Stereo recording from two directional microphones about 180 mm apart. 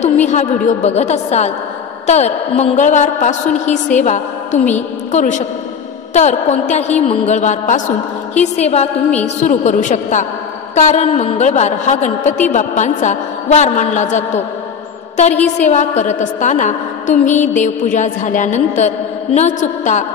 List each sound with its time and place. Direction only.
0.0 s a woman's voice: 40° left (ahead or behind)